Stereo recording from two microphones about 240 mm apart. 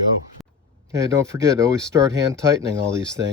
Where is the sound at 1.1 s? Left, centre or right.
Centre.